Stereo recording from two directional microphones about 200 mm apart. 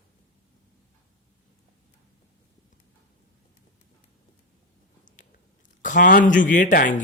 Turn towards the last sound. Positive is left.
turn(degrees=40)  # may be behind; listen again after turning